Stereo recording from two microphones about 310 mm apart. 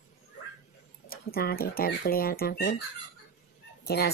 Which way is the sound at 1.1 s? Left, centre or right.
Left.